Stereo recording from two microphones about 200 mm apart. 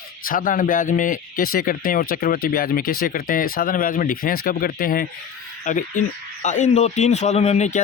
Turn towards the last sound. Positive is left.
turn(degrees=35)  # may be behind; listen again after turning